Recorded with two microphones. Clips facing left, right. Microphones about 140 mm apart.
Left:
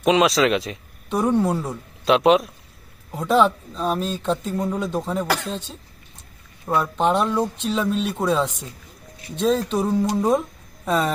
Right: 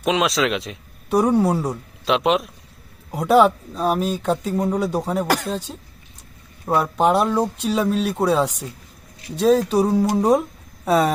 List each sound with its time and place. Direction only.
0.0 s a man's voice: centre (ahead or behind)
3.1 s speech: 10° right (ahead or behind)
5.3 s speech: 40° right (ahead or behind)
6.9 s speech: 10° right (ahead or behind)